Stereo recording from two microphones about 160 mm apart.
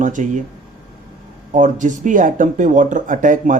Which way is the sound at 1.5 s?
50° right (ahead or behind).